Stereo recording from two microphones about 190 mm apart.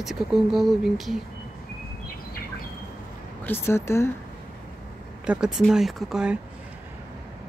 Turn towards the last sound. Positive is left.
turn(degrees=-5)  # may be behind; listen again after turning